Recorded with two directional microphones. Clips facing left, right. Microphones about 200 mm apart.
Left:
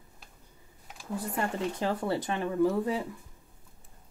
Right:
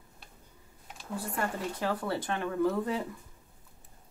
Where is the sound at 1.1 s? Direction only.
20° left (ahead or behind).